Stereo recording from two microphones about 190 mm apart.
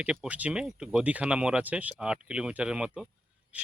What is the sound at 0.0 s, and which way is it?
Speech, 5° right (ahead or behind).